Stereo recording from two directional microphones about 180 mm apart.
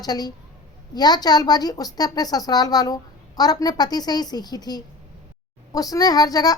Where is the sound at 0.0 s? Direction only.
20° left (ahead or behind).